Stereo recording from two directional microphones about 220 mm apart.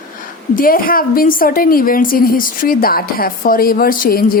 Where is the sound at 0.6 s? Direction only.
40° left (ahead or behind).